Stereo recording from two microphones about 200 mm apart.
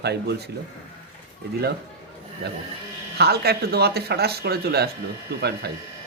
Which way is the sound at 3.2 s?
50° right (ahead or behind).